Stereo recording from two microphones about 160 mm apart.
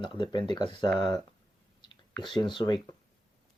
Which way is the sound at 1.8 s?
30° left (ahead or behind).